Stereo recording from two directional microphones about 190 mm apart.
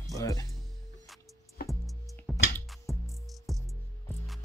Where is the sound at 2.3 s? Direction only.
Centre (ahead or behind).